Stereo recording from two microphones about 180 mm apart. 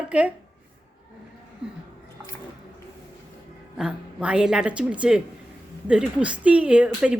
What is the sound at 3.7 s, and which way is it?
A woman's voice, 5° right (ahead or behind).